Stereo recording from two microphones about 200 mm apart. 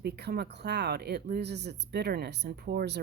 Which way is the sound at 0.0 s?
55° right (ahead or behind).